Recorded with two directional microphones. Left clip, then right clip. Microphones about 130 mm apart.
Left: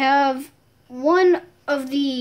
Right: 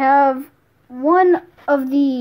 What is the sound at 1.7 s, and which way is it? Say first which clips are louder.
Speech: right 6 dB; 40° right (ahead or behind).